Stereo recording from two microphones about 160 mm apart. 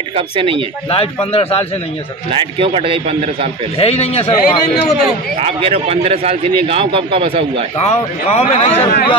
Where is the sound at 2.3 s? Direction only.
35° right (ahead or behind).